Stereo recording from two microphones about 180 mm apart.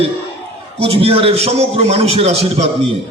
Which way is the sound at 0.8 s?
35° right (ahead or behind).